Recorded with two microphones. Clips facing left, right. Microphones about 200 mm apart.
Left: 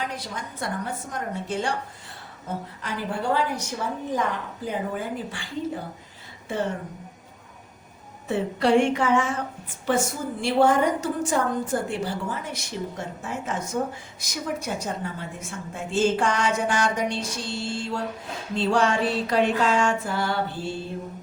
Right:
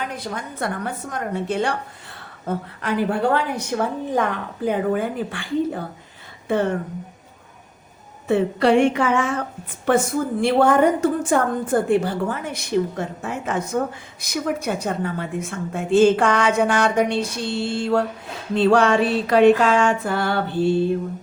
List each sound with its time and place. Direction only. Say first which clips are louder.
0.2 s a woman's voice: right 6 dB; 55° right (ahead or behind)
8.3 s a woman's voice: right 4 dB; 65° right (ahead or behind)